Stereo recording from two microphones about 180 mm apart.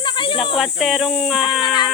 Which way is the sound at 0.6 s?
Centre (ahead or behind).